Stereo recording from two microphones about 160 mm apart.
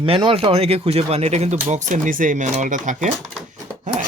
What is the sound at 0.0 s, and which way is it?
Speech, 30° right (ahead or behind).